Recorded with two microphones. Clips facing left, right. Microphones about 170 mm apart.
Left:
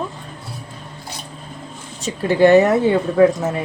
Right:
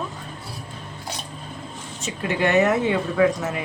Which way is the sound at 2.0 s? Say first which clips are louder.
Left 9 dB; 35° left (ahead or behind).